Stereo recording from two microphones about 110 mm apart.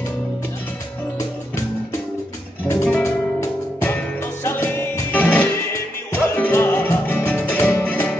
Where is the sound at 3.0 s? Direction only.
25° left (ahead or behind).